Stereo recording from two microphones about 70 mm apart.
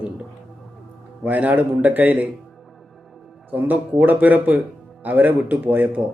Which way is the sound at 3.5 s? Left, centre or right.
Right.